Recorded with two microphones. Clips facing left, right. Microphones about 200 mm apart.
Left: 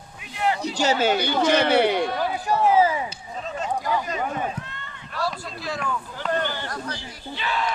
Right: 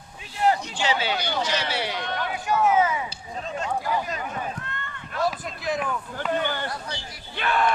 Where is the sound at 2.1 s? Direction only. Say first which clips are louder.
Left 2 dB; 35° left (ahead or behind).